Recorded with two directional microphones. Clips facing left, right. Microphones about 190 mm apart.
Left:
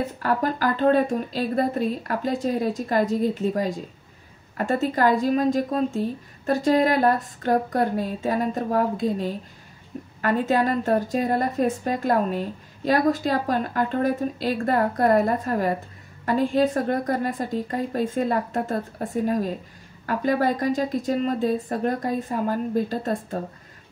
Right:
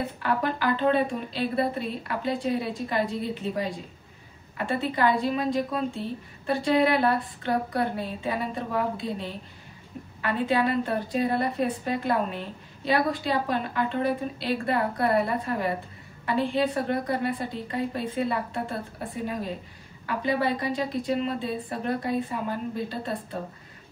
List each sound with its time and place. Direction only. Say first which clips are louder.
0.2 s a woman's voice: left 3 dB; 40° left (ahead or behind)